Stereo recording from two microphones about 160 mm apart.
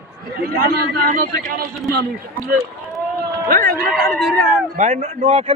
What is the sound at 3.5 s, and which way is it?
Speech, 60° right (ahead or behind).